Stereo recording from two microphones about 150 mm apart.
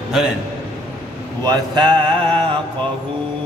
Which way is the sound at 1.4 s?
30° right (ahead or behind).